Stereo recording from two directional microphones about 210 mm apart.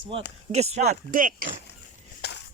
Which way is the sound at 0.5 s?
30° right (ahead or behind).